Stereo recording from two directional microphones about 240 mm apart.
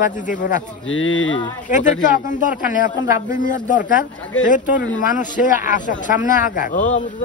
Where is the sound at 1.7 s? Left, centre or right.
Left.